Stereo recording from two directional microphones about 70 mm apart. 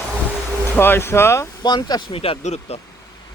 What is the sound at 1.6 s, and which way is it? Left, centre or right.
Speech, left.